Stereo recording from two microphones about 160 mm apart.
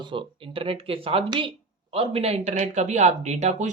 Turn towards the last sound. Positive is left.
turn(degrees=-45)  # may be behind; listen again after turning